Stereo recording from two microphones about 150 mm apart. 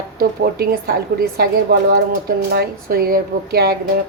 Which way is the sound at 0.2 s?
85° right.